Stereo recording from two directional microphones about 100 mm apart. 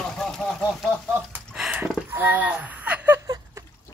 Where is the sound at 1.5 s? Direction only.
10° right (ahead or behind).